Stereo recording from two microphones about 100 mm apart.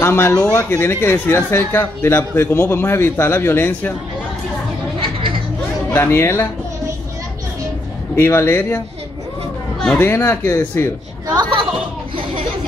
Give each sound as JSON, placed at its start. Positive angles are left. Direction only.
{"t": 0.0, "sound": "speech", "side_deg": 25}
{"t": 5.9, "sound": "speech", "side_deg": 25}
{"t": 8.2, "sound": "speech", "side_deg": 25}
{"t": 9.9, "sound": "speech", "side_deg": 25}